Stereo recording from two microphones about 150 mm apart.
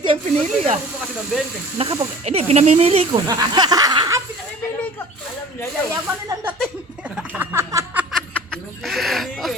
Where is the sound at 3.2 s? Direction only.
25° right (ahead or behind).